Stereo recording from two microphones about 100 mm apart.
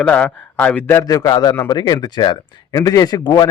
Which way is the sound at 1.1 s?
40° left (ahead or behind).